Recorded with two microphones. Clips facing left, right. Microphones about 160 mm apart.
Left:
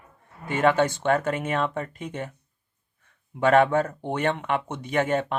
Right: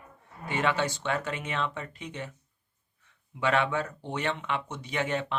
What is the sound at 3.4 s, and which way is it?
Speech, 50° left (ahead or behind).